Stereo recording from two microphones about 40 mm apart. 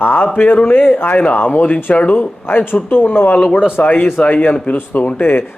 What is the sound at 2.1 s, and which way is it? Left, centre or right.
A man's voice, left.